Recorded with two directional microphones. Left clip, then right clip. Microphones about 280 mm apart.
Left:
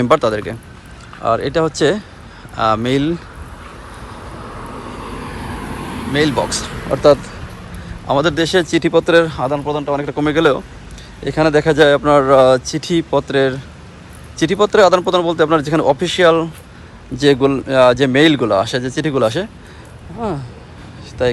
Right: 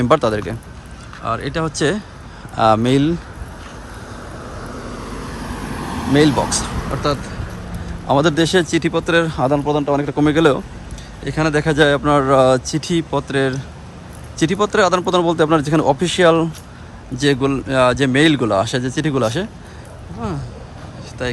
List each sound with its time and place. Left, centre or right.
0.0 s speech: centre
6.1 s speech: centre
7.0 s speech: centre
8.0 s speech: centre
21.2 s speech: centre